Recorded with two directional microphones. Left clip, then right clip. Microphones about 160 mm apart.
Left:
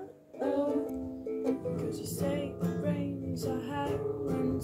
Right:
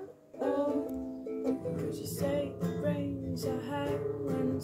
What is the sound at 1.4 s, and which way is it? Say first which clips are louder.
Music: even; 15° left (ahead or behind).